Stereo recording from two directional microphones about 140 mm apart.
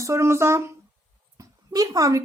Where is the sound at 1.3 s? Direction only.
25° right (ahead or behind).